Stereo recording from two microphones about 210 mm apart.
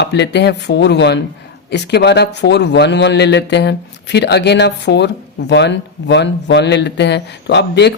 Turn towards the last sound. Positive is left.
turn(degrees=55)  # may be behind; listen again after turning